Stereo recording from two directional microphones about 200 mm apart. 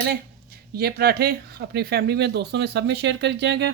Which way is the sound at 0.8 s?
50° right (ahead or behind).